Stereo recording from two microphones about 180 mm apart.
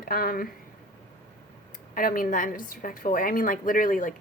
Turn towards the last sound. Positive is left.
turn(degrees=50)  # may be behind; listen again after turning